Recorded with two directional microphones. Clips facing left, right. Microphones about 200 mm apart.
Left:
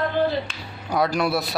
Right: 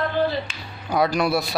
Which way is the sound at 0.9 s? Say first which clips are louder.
Right 1 dB; centre (ahead or behind).